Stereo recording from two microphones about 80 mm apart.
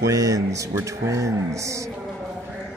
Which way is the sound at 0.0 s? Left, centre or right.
Right.